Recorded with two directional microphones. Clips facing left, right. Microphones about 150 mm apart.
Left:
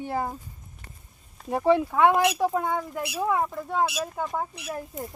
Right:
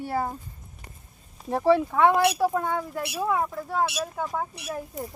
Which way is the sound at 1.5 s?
15° left (ahead or behind).